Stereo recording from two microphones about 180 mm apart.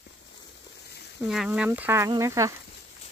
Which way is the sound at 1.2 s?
5° right (ahead or behind).